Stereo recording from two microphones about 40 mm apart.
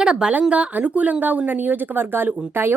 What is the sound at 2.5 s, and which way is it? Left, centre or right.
Speech, right.